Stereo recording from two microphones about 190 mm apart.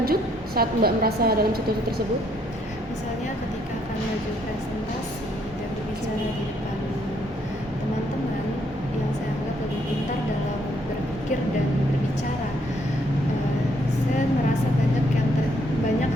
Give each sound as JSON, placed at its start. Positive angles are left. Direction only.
{"t": 0.0, "sound": "a woman's voice", "side_deg": -55}